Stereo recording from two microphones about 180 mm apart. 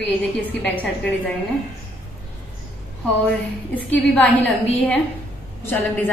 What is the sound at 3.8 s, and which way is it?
A woman's voice, 10° left (ahead or behind).